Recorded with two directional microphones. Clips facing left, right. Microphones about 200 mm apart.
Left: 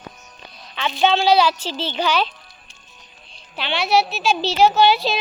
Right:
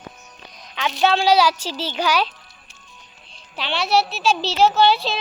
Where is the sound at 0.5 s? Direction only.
15° right (ahead or behind).